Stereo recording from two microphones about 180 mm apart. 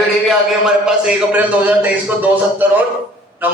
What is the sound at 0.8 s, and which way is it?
A man's voice, 5° right (ahead or behind).